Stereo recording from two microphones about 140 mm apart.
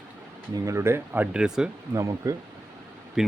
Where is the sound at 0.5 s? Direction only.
20° right (ahead or behind); by 1.7 s 5° right (ahead or behind).